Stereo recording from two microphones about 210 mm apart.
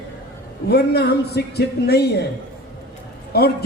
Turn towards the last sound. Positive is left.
turn(degrees=50)  # may be behind; listen again after turning